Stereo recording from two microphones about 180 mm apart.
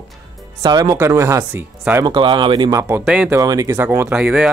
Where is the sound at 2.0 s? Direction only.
25° right (ahead or behind).